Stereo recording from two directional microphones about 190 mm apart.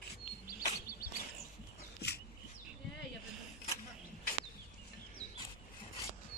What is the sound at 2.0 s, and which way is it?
Bird, 60° left (ahead or behind).